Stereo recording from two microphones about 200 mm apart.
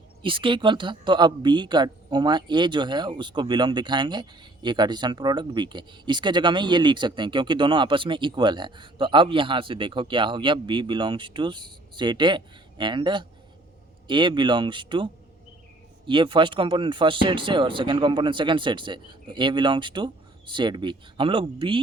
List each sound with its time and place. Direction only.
0.2 s a man's voice: 25° right (ahead or behind)